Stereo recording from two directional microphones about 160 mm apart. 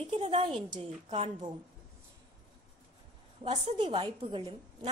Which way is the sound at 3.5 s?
35° right (ahead or behind).